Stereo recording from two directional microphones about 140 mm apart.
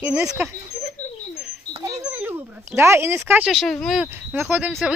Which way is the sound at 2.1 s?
15° right (ahead or behind).